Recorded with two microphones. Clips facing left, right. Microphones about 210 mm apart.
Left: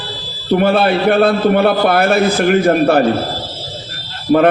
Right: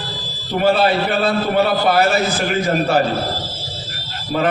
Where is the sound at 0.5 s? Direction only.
55° left (ahead or behind).